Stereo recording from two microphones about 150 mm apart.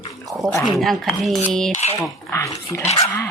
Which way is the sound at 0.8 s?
Centre (ahead or behind).